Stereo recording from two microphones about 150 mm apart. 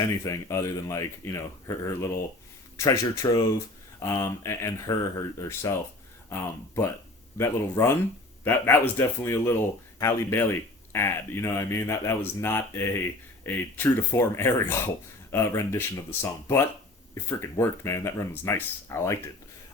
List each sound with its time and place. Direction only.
0.0 s speech: 20° left (ahead or behind)
17.2 s speech: 15° left (ahead or behind)